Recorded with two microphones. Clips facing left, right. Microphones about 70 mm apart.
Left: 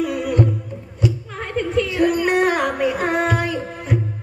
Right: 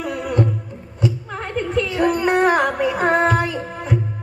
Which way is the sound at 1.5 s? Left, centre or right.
Right.